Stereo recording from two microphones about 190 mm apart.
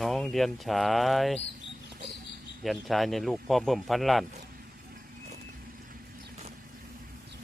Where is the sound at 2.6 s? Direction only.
Centre (ahead or behind).